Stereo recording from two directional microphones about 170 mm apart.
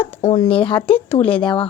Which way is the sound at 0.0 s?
40° left (ahead or behind).